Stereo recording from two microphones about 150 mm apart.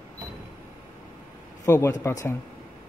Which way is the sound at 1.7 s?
15° left (ahead or behind).